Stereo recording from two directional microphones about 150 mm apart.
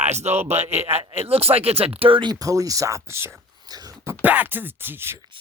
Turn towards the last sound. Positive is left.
turn(degrees=-15)  # may be behind; listen again after turning